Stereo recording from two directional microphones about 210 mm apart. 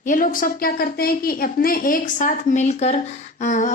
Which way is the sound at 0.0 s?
40° left (ahead or behind).